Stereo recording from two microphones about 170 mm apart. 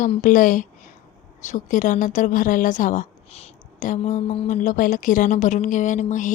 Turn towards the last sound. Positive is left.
turn(degrees=45)  # may be behind; listen again after turning